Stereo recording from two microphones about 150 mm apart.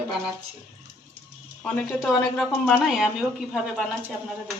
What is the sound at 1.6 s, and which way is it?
Speech, 5° left (ahead or behind).